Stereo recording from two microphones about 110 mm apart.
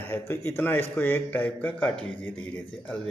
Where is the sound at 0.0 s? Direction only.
20° left (ahead or behind).